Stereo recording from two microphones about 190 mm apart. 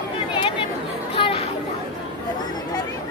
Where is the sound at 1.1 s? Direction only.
30° left (ahead or behind).